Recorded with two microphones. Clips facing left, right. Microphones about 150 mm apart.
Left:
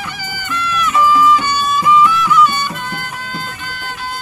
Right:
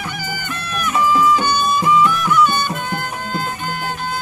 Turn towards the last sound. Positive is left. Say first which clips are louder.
# right 3 dB
turn(degrees=-50)  # may be behind; listen again after turning